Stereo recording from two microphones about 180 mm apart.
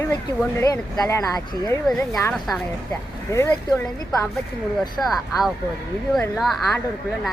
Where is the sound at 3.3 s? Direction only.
15° left (ahead or behind).